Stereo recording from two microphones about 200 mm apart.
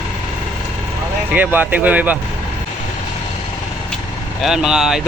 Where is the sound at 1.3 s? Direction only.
10° right (ahead or behind).